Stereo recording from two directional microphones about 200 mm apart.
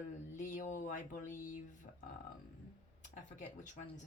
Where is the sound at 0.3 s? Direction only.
40° left (ahead or behind).